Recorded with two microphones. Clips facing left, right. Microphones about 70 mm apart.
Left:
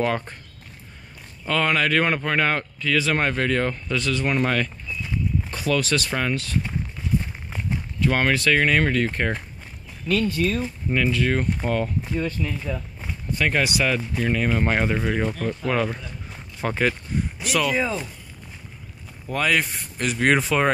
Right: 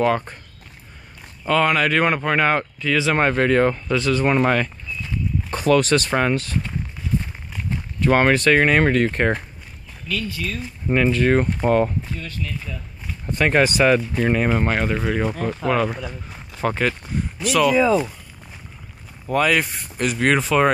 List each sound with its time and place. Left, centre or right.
0.0 s speech: centre
1.5 s speech: centre; by 4.6 s right
5.5 s speech: right
8.0 s speech: right
10.0 s speech: left
10.9 s speech: right
12.2 s speech: centre
13.3 s speech: right
14.7 s speech: centre
15.0 s speech: centre
16.3 s a sound: centre
17.4 s speech: centre
19.2 s speech: centre